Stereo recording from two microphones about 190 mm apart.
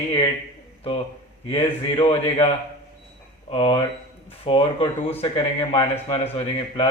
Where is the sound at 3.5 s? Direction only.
30° left (ahead or behind).